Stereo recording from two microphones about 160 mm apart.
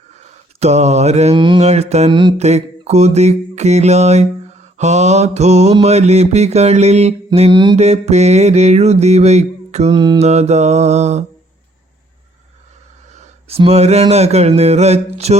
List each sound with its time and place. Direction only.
0.1 s a sound: 45° right (ahead or behind)
1.4 s mantra: 30° right (ahead or behind)
1.6 s mantra: 40° right (ahead or behind)
2.0 s mantra: 30° right (ahead or behind)
2.4 s mantra: 45° right (ahead or behind)
7.3 s a sound: 40° right (ahead or behind)
7.8 s mantra: 45° right (ahead or behind)
9.9 s mantra: 30° right (ahead or behind)
10.2 s mantra: 40° right (ahead or behind)
13.1 s a sound: 45° right (ahead or behind)